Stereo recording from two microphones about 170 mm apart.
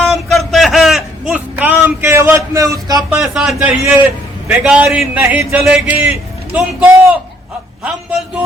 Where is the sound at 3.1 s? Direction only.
Centre (ahead or behind).